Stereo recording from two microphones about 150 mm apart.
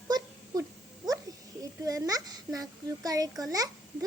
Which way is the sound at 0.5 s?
25° right (ahead or behind).